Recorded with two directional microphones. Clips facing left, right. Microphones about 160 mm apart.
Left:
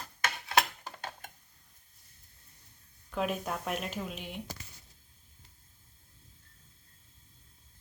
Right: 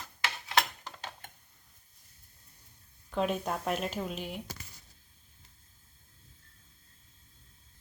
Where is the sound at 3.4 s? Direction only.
35° right (ahead or behind).